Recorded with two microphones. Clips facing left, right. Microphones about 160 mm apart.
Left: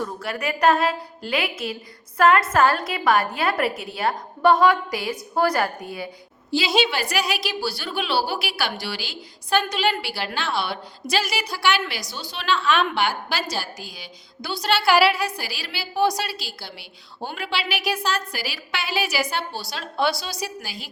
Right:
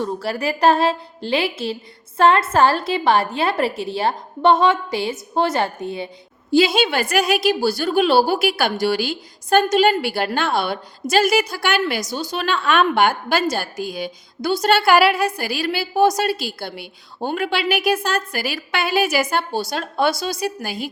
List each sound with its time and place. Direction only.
0.0 s a woman's voice: 30° right (ahead or behind)
6.7 s a woman's voice: 50° right (ahead or behind)